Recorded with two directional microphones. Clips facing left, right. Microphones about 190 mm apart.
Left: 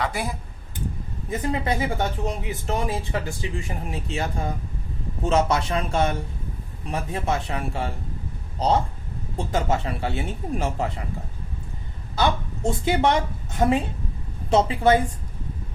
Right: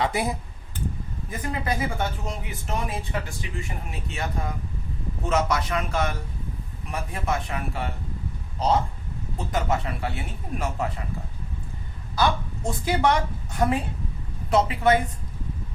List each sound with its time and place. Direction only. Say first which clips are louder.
0.0 s speech: right 2 dB; 25° right (ahead or behind)
1.3 s speech: left 4 dB; 25° left (ahead or behind)
12.6 s speech: left 2 dB; 25° left (ahead or behind)